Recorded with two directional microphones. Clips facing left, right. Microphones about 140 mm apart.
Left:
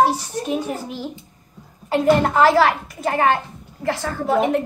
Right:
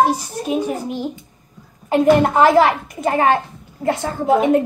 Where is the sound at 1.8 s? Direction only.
20° right (ahead or behind).